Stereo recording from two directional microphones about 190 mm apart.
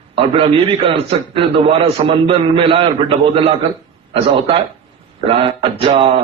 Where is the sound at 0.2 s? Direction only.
30° right (ahead or behind).